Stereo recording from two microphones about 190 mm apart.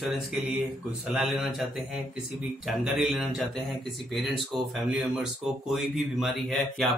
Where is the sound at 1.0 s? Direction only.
Centre (ahead or behind).